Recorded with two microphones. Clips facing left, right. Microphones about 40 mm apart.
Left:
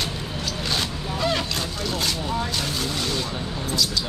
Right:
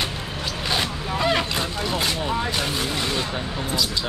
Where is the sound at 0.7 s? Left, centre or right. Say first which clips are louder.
Right 4 dB; centre.